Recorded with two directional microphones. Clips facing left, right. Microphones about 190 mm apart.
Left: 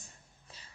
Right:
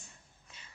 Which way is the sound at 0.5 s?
35° left (ahead or behind).